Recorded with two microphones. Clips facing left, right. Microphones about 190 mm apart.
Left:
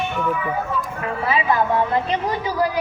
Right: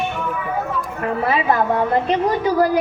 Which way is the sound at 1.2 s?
50° right (ahead or behind).